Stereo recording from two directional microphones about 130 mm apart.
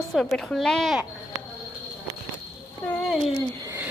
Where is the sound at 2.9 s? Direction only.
5° left (ahead or behind).